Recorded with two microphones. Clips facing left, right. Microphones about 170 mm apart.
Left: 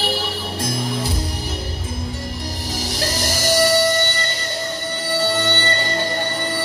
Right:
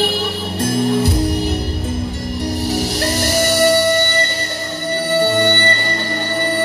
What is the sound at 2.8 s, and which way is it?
Music, 60° right (ahead or behind).